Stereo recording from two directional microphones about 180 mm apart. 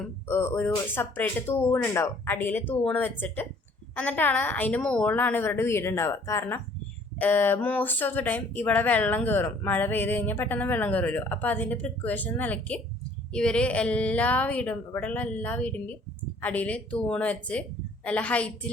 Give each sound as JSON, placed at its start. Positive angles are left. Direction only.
{"t": 0.3, "sound": "speech", "side_deg": 10}